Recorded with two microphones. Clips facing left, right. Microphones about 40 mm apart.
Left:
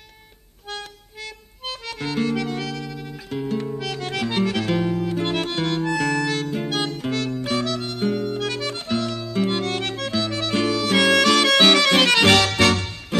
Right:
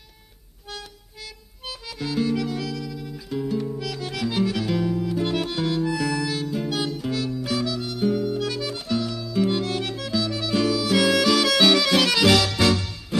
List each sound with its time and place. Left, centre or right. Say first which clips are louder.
1.7 s music: left 2 dB; left
4.9 s harmonica: left 1 dB; left
6.5 s music: left 1 dB; left